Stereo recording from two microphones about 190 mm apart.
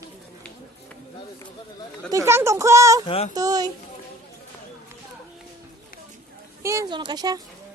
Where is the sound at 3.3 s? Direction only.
20° right (ahead or behind).